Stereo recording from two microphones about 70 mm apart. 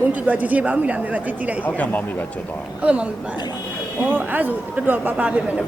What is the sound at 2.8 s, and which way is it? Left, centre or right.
Speech, centre.